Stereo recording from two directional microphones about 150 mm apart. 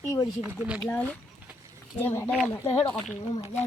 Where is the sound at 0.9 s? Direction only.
10° left (ahead or behind).